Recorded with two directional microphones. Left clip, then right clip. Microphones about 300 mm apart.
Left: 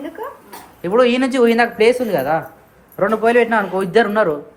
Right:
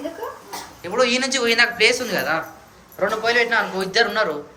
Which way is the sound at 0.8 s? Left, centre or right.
Left.